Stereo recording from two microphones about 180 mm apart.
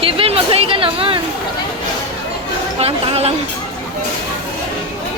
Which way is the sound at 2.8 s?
35° right (ahead or behind).